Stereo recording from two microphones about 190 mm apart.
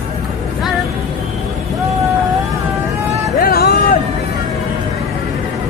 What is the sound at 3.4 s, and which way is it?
Vehicle, 55° left (ahead or behind).